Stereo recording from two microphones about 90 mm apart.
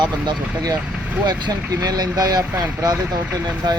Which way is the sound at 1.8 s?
45° right (ahead or behind).